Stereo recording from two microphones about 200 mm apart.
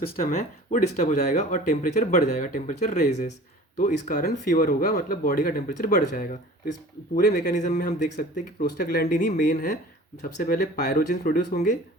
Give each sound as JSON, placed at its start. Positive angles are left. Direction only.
{"t": 0.2, "sound": "speech", "side_deg": 35}